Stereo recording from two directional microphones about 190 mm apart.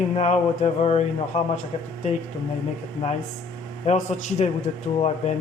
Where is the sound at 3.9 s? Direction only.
35° left (ahead or behind).